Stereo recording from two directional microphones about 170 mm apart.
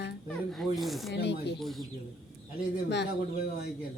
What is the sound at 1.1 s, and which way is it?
Speech, 90° left.